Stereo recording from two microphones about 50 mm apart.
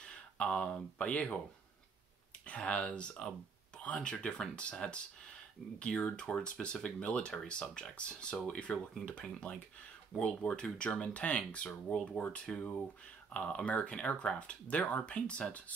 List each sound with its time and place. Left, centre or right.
0.0 s speech: centre
2.4 s speech: left